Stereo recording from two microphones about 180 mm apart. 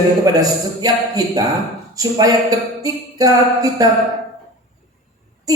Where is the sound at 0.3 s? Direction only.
20° right (ahead or behind).